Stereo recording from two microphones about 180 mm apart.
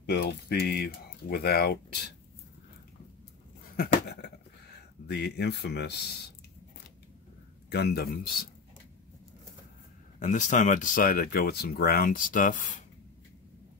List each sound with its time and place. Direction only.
0.1 s speech: 65° left (ahead or behind)
3.7 s a sound: 55° left (ahead or behind)
5.0 s speech: 65° left (ahead or behind)
7.7 s speech: 65° left (ahead or behind)
10.1 s speech: 40° left (ahead or behind)